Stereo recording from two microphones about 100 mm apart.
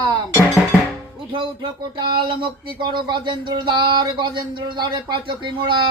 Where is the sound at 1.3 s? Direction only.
50° right (ahead or behind).